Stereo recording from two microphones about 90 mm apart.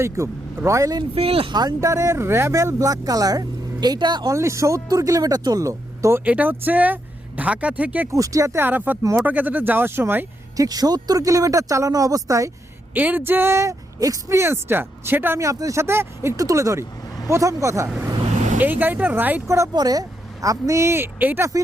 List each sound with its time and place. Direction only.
0.0 s speech: 30° right (ahead or behind)
1.1 s speech: 90° right
1.8 s speech: 35° right (ahead or behind); by 4.3 s 55° right (ahead or behind)
4.3 s speech: 35° right (ahead or behind)
6.2 s speech: 15° right (ahead or behind)
8.1 s speech: 40° right (ahead or behind)
8.5 s speech: 20° right (ahead or behind)
10.6 s speech: 45° right (ahead or behind)
12.9 s speech: 20° right (ahead or behind)
15.4 s speech: 35° right (ahead or behind)
18.6 s speech: 20° right (ahead or behind)
19.5 s speech: 35° right (ahead or behind)
19.7 s speech: 45° right (ahead or behind); by 21.4 s 25° right (ahead or behind)